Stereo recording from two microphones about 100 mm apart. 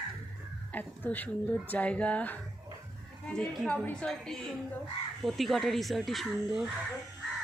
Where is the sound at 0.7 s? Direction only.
15° left (ahead or behind).